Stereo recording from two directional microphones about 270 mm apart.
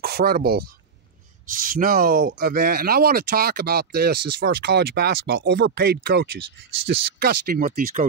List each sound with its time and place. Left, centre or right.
0.0 s speech: right